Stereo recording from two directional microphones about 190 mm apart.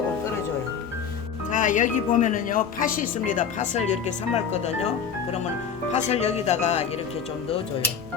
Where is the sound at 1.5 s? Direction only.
40° left (ahead or behind).